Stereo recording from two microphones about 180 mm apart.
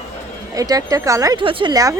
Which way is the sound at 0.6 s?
20° right (ahead or behind).